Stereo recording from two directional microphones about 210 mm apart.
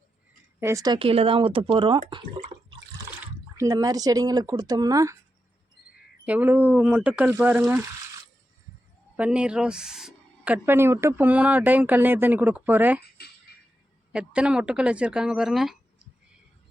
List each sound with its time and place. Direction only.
0.6 s speech: 15° right (ahead or behind)
3.6 s speech: 15° right (ahead or behind)
6.2 s speech: 10° right (ahead or behind)
9.1 s speech: 5° right (ahead or behind)
14.1 s speech: 5° right (ahead or behind)